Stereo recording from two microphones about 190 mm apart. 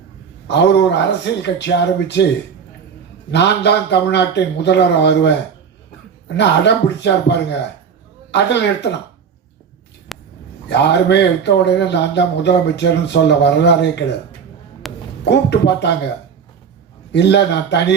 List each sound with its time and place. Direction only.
0.4 s speech: 65° left (ahead or behind)
3.3 s speech: 65° left (ahead or behind)
10.1 s a sound: centre (ahead or behind)
10.7 s speech: 65° left (ahead or behind)
14.8 s a sound: centre (ahead or behind)
15.2 s speech: 65° left (ahead or behind)
17.1 s speech: 65° left (ahead or behind)